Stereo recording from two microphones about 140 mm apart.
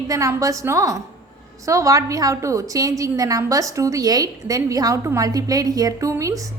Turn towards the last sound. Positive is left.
turn(degrees=-25)  # may be behind; listen again after turning